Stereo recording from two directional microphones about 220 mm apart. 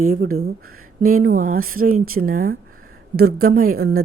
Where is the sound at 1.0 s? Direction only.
40° right (ahead or behind).